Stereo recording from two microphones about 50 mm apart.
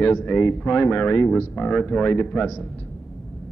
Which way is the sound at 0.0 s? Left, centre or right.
Left.